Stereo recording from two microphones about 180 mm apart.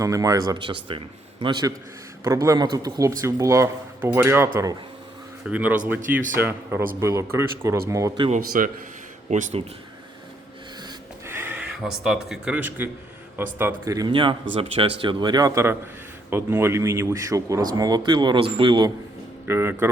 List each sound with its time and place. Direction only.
0.0 s a man's voice: 20° right (ahead or behind)
5.5 s a man's voice: 10° right (ahead or behind)
8.3 s a man's voice: 50° right (ahead or behind)
11.3 s a man's voice: 10° right (ahead or behind)
19.5 s a man's voice: 15° right (ahead or behind)